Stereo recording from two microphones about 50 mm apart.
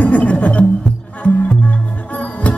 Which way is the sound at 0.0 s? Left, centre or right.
Left.